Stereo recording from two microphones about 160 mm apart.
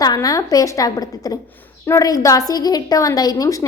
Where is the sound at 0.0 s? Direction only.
25° left (ahead or behind).